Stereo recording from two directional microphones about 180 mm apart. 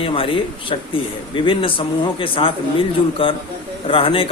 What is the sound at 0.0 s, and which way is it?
Speech, 30° left (ahead or behind).